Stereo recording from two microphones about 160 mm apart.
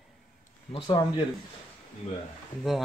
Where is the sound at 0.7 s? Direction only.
35° left (ahead or behind).